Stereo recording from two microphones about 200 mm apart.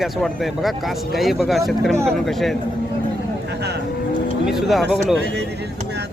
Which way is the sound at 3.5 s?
55° right (ahead or behind).